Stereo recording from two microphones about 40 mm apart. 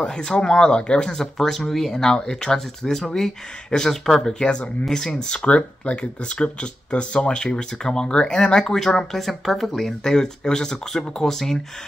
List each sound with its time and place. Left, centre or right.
0.0 s speech: centre
1.1 s speech: centre
5.3 s speech: left; by 11.6 s centre